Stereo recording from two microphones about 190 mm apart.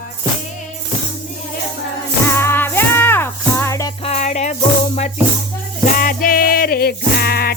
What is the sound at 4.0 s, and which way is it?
Music, 35° left (ahead or behind).